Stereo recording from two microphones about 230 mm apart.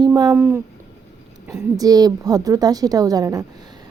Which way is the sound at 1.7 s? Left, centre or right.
Centre.